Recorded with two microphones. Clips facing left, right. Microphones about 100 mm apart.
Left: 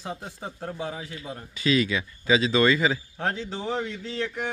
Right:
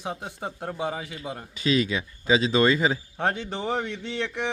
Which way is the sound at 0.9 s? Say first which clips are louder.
Right 2 dB; 70° right (ahead or behind).